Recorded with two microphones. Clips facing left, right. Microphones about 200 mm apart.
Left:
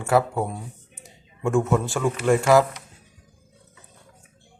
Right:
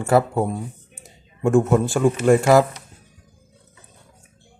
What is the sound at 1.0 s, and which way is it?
Speech, 45° right (ahead or behind).